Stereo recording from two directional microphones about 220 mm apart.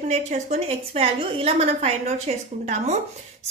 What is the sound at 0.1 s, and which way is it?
A woman's voice, 30° right (ahead or behind).